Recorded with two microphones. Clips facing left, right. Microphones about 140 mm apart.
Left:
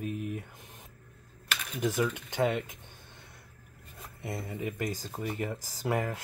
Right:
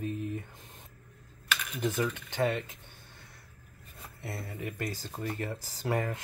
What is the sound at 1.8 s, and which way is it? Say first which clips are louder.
Speech: left 2 dB; 15° left (ahead or behind).